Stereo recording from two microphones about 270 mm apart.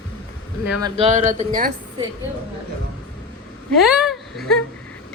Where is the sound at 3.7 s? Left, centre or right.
Centre.